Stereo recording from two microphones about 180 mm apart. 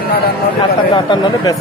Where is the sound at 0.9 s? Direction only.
20° left (ahead or behind).